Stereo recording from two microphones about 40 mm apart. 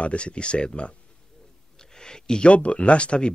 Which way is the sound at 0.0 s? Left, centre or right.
Left.